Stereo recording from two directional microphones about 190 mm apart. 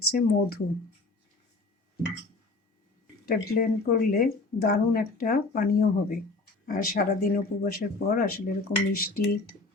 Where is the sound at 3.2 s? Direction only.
50° left (ahead or behind).